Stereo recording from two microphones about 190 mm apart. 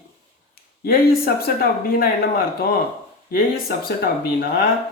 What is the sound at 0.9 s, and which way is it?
Speech, 50° left (ahead or behind).